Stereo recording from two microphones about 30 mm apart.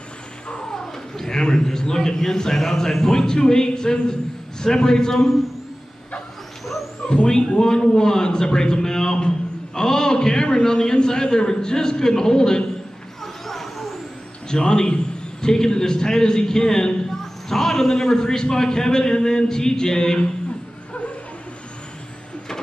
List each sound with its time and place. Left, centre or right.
0.5 s vehicle: left
0.7 s a man's voice: centre
7.2 s a man's voice: left
13.2 s vehicle: centre
14.5 s a man's voice: left